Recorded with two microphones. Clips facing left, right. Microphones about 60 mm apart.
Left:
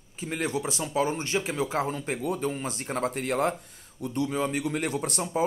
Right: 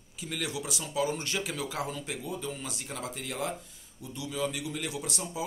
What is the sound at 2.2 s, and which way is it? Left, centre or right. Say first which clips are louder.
Speech: left 8 dB; left.